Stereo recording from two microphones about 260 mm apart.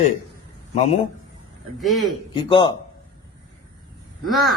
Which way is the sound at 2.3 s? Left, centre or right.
Centre.